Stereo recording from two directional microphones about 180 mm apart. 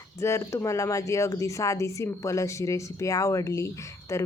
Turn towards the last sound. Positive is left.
turn(degrees=15)  # may be behind; listen again after turning